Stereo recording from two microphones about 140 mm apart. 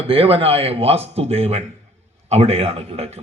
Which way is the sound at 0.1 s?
45° right (ahead or behind).